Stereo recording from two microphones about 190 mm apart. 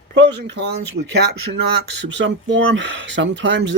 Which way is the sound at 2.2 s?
75° right (ahead or behind).